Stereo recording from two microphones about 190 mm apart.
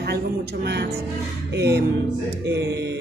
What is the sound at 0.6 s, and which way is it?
Speech, 60° right (ahead or behind).